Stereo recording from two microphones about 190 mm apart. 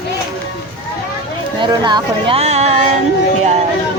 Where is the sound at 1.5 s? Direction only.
25° right (ahead or behind).